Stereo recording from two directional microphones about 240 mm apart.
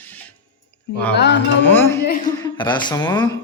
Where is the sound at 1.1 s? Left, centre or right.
Left.